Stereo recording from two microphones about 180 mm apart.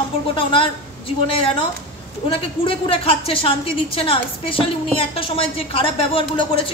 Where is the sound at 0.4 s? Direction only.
30° left (ahead or behind).